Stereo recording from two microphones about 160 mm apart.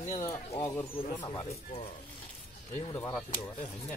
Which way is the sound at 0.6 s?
20° left (ahead or behind).